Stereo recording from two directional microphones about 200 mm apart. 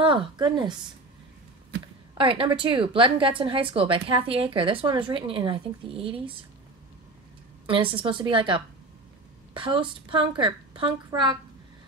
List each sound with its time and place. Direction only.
0.0 s a woman's voice: 25° right (ahead or behind)
2.1 s a woman's voice: 25° right (ahead or behind)
7.6 s a woman's voice: 25° right (ahead or behind)